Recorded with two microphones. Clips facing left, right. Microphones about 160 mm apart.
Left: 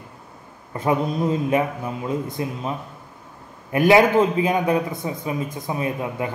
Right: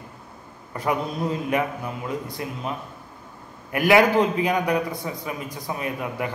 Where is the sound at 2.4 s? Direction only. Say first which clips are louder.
Left 5 dB; 25° left (ahead or behind).